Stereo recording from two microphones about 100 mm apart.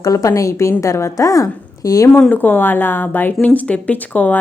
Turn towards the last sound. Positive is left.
turn(degrees=15)  # may be behind; listen again after turning